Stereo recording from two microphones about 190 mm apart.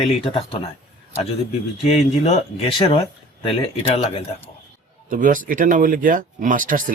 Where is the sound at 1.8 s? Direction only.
30° left (ahead or behind).